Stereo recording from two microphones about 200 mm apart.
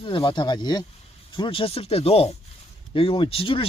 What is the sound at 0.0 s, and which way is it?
Speech, 25° left (ahead or behind).